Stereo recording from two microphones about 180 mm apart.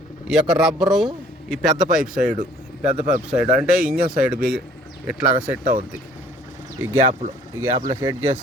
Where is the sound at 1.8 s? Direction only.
45° right (ahead or behind).